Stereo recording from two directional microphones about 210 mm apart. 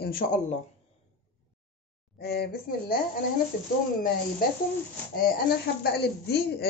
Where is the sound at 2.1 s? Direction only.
50° left (ahead or behind).